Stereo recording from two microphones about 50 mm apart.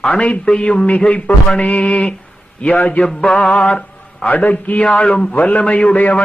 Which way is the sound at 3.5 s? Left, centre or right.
Centre.